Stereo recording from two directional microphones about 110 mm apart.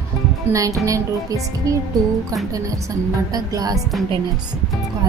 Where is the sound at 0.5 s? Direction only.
30° right (ahead or behind).